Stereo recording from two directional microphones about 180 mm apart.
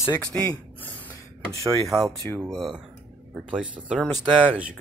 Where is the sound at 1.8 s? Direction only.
Centre (ahead or behind).